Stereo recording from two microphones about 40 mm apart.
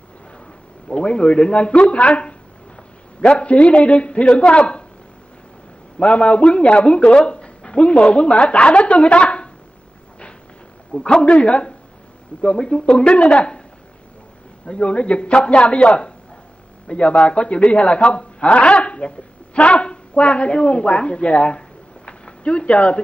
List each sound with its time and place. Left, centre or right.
0.8 s speech: left
3.3 s speech: left
5.9 s speech: left
10.9 s a man's voice: left
14.7 s a man's voice: left